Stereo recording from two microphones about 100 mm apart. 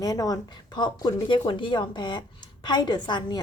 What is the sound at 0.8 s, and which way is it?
A woman's voice, 50° left (ahead or behind).